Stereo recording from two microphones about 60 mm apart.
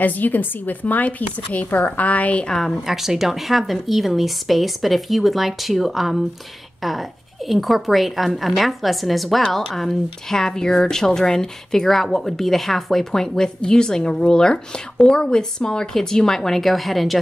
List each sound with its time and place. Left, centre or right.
0.0 s speech: left
2.4 s speech: centre
2.9 s a woman's voice: centre